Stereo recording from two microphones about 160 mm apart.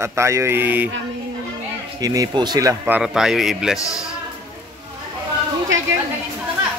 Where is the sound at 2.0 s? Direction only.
25° right (ahead or behind).